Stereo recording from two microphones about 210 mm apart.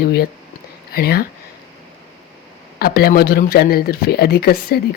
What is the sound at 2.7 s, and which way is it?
Speech, 50° left (ahead or behind).